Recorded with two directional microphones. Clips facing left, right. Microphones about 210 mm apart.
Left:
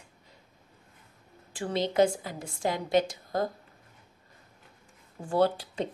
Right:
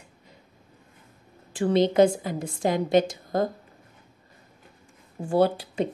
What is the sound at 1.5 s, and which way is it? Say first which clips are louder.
A woman's voice: right 9 dB; 20° right (ahead or behind).